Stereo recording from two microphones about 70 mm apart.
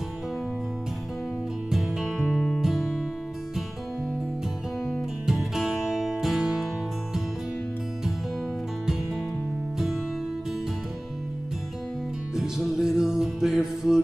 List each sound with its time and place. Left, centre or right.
1.7 s music: centre
2.3 s music: centre
5.2 s music: centre
12.4 s music: centre